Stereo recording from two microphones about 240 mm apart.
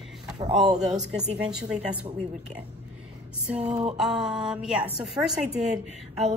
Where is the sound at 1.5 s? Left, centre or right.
Centre.